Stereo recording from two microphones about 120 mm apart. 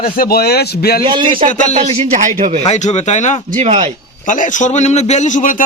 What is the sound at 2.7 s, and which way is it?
Speech, 70° left (ahead or behind).